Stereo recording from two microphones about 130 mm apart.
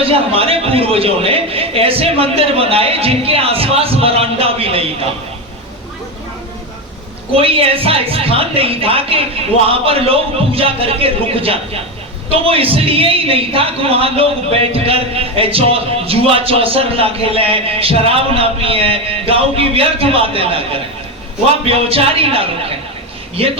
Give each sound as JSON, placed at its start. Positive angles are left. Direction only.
{"t": 0.0, "sound": "a man's voice", "side_deg": -45}
{"t": 7.3, "sound": "a man's voice", "side_deg": -45}
{"t": 21.7, "sound": "a man's voice", "side_deg": -45}